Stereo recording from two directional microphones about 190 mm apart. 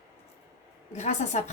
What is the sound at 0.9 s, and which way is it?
Speech, 35° left (ahead or behind).